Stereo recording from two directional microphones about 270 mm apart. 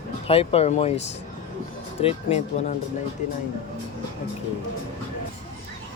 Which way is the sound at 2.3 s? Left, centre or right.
Left.